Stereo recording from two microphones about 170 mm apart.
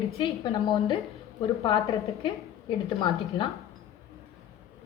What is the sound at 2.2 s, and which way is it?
Speech, 30° left (ahead or behind).